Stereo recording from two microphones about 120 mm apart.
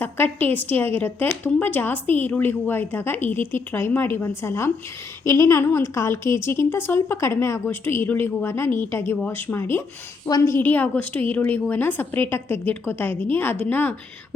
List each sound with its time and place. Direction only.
0.0 s a woman's voice: 15° left (ahead or behind)